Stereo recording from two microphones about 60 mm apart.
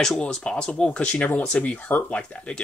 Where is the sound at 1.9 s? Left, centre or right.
Left.